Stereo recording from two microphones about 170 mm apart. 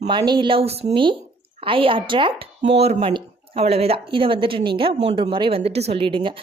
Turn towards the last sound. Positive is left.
turn(degrees=-30)  # may be behind; listen again after turning